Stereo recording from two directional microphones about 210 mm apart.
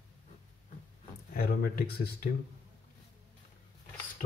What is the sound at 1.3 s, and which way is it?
Speech, 45° left (ahead or behind).